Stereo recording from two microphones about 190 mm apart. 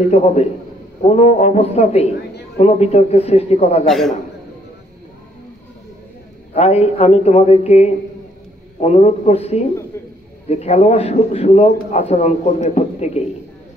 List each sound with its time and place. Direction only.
0.1 s speech: 35° left (ahead or behind)
6.5 s speech: 35° left (ahead or behind)